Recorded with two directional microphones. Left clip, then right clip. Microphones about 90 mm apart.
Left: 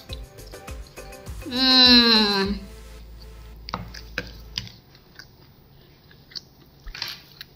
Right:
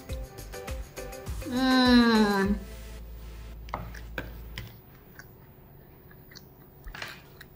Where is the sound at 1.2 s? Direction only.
Centre (ahead or behind).